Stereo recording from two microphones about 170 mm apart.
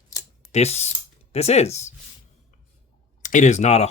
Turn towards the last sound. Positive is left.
turn(degrees=40)  # may be behind; listen again after turning